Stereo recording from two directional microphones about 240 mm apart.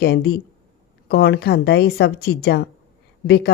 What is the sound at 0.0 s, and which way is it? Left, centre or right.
A woman's voice, left.